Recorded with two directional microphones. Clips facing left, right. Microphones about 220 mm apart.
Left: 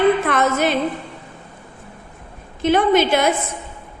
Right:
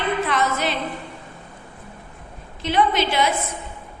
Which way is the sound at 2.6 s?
50° left (ahead or behind).